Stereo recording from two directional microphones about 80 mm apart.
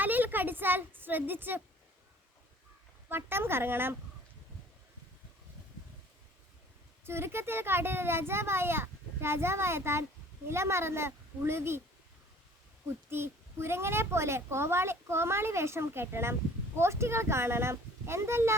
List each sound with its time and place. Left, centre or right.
0.0 s a sound: right
3.1 s speech: right
7.0 s a child's voice: right
13.1 s a child's voice: right